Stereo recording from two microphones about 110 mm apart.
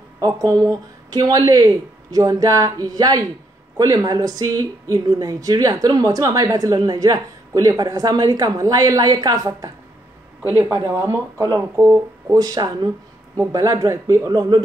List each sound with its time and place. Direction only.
0.2 s a woman's voice: 35° right (ahead or behind)
10.5 s speech: 20° right (ahead or behind)
12.3 s a woman's voice: 35° right (ahead or behind)